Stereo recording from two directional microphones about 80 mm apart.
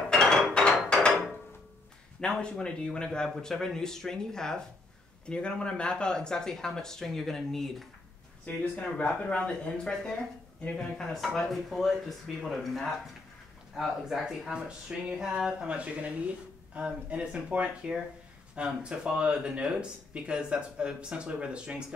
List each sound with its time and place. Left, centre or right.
0.1 s hammer: centre
2.1 s speech: centre
8.5 s speech: centre